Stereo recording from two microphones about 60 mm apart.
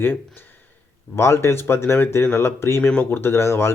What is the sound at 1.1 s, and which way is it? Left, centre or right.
Speech, left.